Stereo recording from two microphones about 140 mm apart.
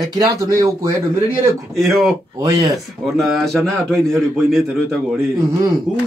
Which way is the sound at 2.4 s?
25° right (ahead or behind).